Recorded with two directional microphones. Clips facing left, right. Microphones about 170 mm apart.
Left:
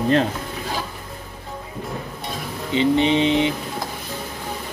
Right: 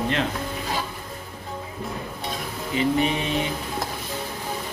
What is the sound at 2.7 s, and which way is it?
Music, 25° left (ahead or behind).